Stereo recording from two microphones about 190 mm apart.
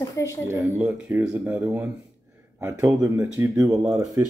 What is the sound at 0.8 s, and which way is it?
Speech, 10° right (ahead or behind).